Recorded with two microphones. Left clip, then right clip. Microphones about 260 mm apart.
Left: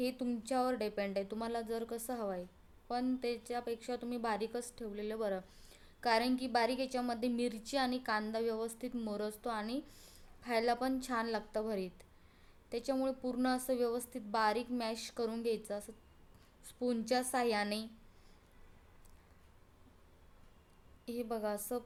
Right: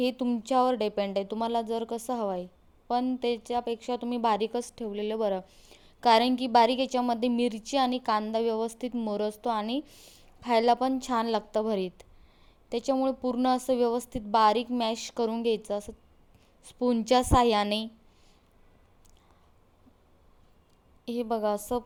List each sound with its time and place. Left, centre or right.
0.0 s speech: right
21.0 s speech: right